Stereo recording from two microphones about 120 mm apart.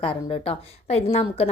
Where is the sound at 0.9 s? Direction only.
60° left (ahead or behind).